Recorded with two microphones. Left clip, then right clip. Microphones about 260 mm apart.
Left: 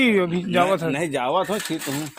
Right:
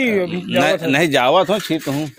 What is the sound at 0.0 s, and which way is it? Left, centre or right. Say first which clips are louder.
Speech: right 1 dB; centre.